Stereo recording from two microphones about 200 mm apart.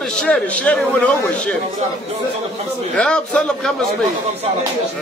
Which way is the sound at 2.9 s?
5° left (ahead or behind).